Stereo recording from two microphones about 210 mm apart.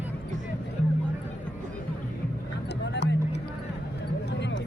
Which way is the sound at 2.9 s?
55° left (ahead or behind).